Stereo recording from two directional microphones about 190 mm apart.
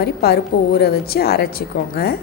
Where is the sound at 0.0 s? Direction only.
55° left (ahead or behind).